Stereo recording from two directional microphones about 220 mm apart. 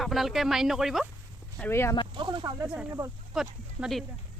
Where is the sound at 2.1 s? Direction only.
20° right (ahead or behind).